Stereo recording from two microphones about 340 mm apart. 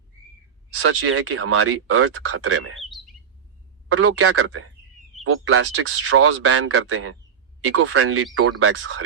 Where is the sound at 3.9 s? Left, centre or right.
Right.